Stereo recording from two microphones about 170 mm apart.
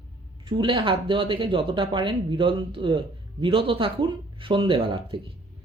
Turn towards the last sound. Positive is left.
turn(degrees=-30)  # may be behind; listen again after turning